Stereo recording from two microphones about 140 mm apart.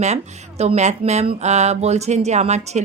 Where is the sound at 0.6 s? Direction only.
55° right (ahead or behind).